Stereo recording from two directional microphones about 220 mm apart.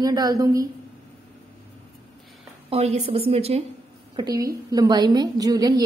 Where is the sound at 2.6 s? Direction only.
30° right (ahead or behind).